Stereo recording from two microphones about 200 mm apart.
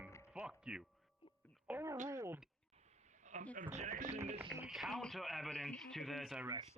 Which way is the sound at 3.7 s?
35° right (ahead or behind).